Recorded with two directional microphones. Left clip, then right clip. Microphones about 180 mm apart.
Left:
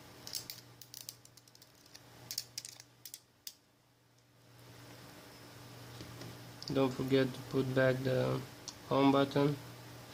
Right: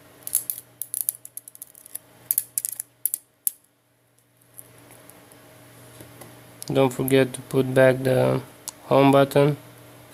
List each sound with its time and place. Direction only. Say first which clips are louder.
6.7 s speech: right 12 dB; 55° right (ahead or behind)